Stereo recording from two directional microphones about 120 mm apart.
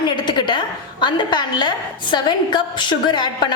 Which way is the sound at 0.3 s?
40° left (ahead or behind).